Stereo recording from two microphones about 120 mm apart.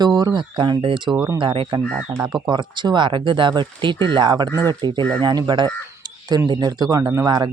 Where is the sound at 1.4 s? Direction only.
45° right (ahead or behind).